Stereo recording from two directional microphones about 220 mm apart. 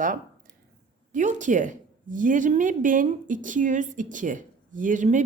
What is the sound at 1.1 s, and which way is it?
A woman's voice, 35° right (ahead or behind).